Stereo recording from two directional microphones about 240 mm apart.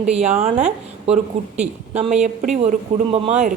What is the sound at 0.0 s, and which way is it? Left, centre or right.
A woman's voice, right.